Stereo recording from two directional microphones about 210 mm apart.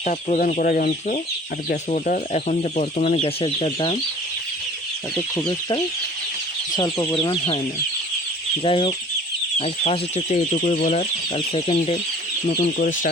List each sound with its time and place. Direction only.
0.0 s speech: 35° left (ahead or behind)
5.5 s speech: 20° left (ahead or behind)
8.6 s speech: 25° left (ahead or behind)
10.6 s speech: 40° left (ahead or behind)
11.3 s speech: 25° left (ahead or behind)
12.5 s speech: 40° left (ahead or behind)